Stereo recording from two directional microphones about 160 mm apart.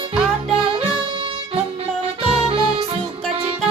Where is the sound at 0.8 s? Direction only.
35° right (ahead or behind).